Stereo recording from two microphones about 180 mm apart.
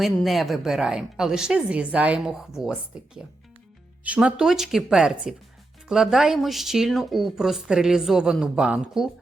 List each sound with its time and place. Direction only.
0.0 s speech: centre (ahead or behind)
4.0 s speech: 5° right (ahead or behind)